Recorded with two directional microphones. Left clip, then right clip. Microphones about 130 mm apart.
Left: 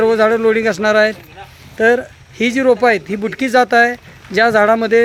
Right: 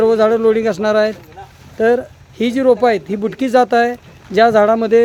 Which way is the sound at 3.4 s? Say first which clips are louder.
Left 1 dB; 20° right (ahead or behind).